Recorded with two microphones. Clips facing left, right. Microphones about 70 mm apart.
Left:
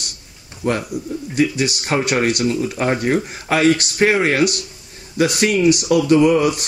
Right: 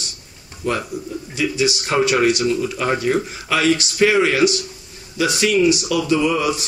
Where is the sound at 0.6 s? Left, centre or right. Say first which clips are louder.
Left 2 dB; left.